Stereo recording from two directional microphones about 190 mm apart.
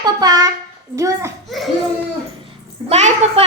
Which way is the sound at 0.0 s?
20° right (ahead or behind).